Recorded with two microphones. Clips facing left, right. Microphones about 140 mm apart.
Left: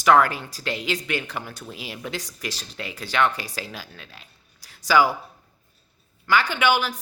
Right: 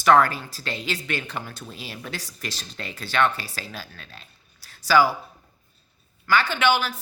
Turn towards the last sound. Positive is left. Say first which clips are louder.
# even
turn(degrees=15)  # may be behind; listen again after turning